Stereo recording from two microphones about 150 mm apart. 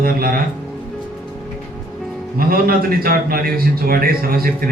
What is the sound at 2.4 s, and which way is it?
A man's voice, 75° right (ahead or behind).